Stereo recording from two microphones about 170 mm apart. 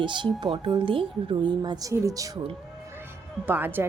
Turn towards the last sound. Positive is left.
turn(degrees=-10)  # may be behind; listen again after turning